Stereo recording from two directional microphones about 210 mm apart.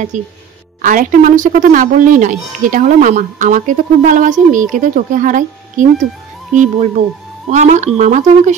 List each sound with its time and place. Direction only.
0.1 s speech: 35° right (ahead or behind)